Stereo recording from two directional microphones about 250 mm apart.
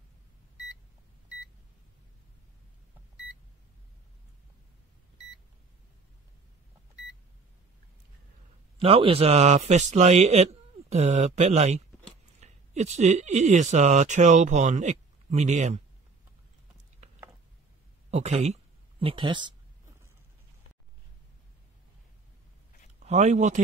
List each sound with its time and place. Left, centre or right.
8.7 s a man's voice: right
18.1 s speech: right
22.9 s speech: right